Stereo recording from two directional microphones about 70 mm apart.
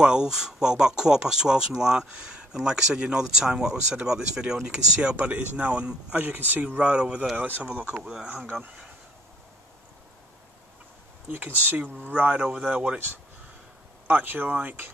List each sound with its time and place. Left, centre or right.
0.0 s speech: centre
6.1 s speech: right
7.3 s speech: right
8.0 s speech: centre
12.2 s speech: centre
14.0 s speech: right